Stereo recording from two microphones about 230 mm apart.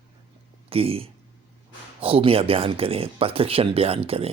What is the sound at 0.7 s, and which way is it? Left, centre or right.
Speech, right.